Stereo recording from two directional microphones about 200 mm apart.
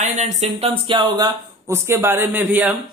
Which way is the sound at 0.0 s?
35° right (ahead or behind).